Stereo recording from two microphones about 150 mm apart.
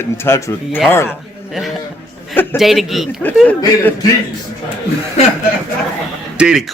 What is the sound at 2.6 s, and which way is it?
Speech, centre (ahead or behind).